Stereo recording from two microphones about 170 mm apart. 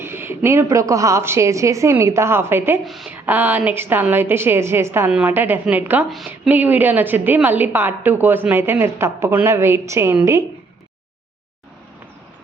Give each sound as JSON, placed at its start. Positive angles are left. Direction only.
{"t": 0.0, "sound": "a woman's voice", "side_deg": -15}
{"t": 2.8, "sound": "a woman's voice", "side_deg": 0}
{"t": 3.2, "sound": "a woman's voice", "side_deg": -10}